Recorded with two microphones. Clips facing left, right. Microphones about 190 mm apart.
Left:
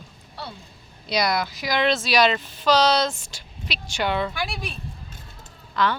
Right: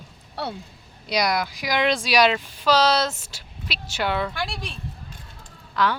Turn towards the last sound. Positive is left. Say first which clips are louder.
# even
turn(degrees=-10)  # may be behind; listen again after turning